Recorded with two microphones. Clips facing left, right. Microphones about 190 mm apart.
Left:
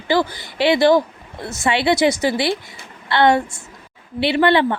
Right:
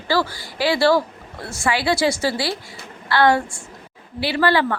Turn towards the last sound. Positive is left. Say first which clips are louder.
# left 3 dB
turn(degrees=20)  # may be behind; listen again after turning